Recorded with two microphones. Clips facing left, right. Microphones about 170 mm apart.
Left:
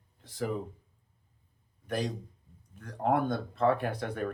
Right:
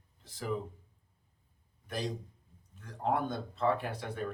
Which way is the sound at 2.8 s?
55° left (ahead or behind).